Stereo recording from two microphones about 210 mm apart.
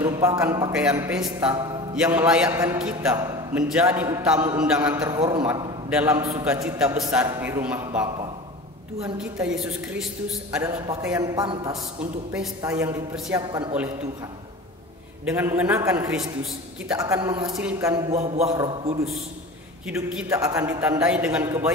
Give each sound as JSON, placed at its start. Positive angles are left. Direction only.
{"t": 0.0, "sound": "a man's voice", "side_deg": -15}
{"t": 15.2, "sound": "a man's voice", "side_deg": -10}
{"t": 17.5, "sound": "a man's voice", "side_deg": -5}
{"t": 18.1, "sound": "a man's voice", "side_deg": -30}
{"t": 18.5, "sound": "a man's voice", "side_deg": -15}
{"t": 19.9, "sound": "a woman's voice", "side_deg": -5}
{"t": 20.2, "sound": "a man's voice", "side_deg": -15}